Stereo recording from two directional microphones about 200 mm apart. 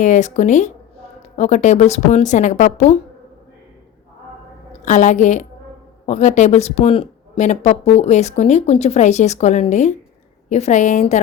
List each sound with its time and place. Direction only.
0.0 s speech: 40° left (ahead or behind)
4.8 s speech: 35° left (ahead or behind)